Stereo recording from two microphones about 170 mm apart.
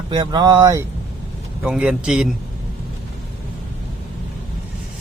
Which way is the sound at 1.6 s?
5° right (ahead or behind).